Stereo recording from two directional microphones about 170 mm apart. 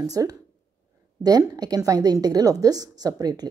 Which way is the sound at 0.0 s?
20° right (ahead or behind).